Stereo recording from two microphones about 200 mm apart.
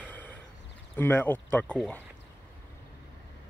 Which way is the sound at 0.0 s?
10° left (ahead or behind).